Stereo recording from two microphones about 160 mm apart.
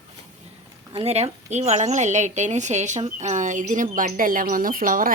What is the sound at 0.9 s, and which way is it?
Speech, 40° right (ahead or behind).